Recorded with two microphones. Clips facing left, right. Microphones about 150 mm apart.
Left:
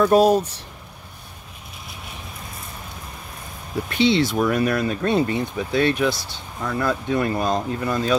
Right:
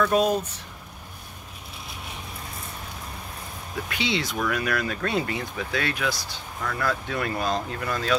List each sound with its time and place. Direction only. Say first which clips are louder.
0.0 s speech: left 6 dB; 35° left (ahead or behind)
3.9 s speech: left 10 dB; 30° left (ahead or behind)